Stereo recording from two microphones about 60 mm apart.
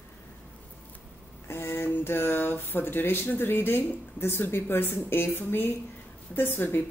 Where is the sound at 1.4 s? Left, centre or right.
Left.